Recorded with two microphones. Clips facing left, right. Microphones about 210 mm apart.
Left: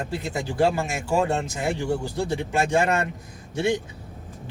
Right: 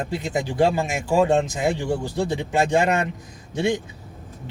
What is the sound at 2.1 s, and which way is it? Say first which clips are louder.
Speech: right 2 dB; 20° right (ahead or behind).